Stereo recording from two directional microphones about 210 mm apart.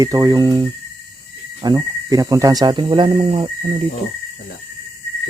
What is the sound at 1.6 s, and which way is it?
Speech, 15° right (ahead or behind).